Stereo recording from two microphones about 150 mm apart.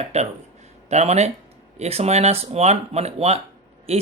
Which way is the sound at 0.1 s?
45° right (ahead or behind).